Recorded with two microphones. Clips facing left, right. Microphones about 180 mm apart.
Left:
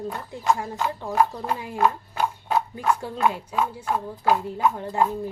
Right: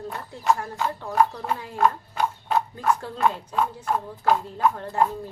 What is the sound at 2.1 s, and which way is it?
Horse, 5° left (ahead or behind).